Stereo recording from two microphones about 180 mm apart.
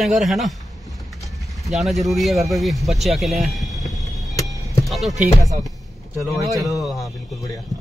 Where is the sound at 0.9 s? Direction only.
Centre (ahead or behind).